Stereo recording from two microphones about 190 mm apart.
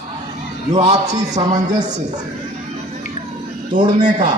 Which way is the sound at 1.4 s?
40° right (ahead or behind).